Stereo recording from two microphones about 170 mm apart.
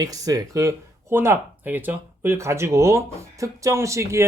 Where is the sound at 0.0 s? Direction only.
20° right (ahead or behind).